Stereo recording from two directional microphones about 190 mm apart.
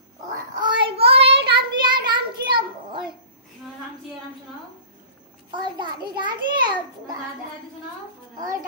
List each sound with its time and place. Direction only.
0.6 s child singing: 30° right (ahead or behind)
5.5 s a child's voice: 25° right (ahead or behind)